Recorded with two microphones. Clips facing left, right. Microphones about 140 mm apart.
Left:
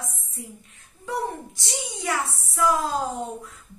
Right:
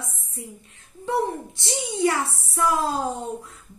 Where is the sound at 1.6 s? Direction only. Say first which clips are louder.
Right 15 dB; 25° right (ahead or behind).